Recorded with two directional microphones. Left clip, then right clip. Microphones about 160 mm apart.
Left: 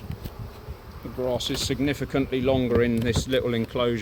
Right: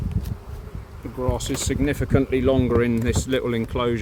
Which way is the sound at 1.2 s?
90° right.